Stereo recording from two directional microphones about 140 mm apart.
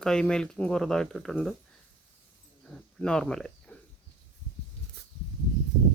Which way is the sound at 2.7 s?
5° left (ahead or behind).